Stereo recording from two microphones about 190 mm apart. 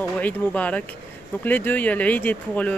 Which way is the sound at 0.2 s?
5° left (ahead or behind).